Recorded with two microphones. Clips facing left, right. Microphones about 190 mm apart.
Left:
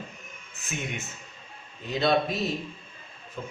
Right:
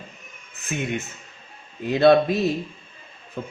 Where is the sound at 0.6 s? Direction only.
55° right (ahead or behind).